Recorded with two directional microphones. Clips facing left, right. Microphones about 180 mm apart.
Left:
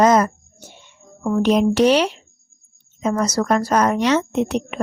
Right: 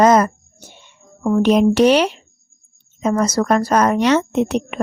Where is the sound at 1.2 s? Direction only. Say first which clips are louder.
Right 3 dB; 45° right (ahead or behind).